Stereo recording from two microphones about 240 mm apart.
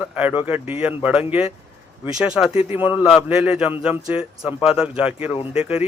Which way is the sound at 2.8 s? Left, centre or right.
Left.